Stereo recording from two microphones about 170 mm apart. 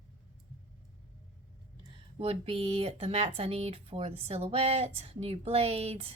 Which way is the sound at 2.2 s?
35° right (ahead or behind).